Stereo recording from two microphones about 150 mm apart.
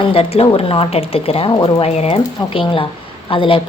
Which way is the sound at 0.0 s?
40° left (ahead or behind).